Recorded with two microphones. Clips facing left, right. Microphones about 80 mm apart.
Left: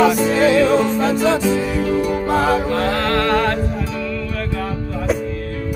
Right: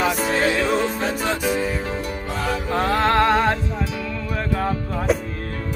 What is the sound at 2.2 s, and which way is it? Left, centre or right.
Music, left.